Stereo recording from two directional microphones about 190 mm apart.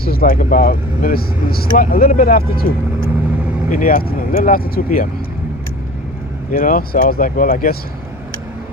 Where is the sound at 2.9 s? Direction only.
10° right (ahead or behind).